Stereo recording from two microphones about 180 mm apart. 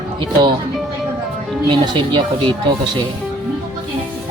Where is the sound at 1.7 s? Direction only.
25° right (ahead or behind).